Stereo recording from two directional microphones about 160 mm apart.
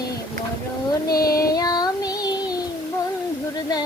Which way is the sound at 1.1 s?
70° left (ahead or behind).